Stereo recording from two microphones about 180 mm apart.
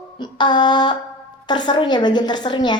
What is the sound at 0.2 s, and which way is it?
A woman's voice, 25° left (ahead or behind).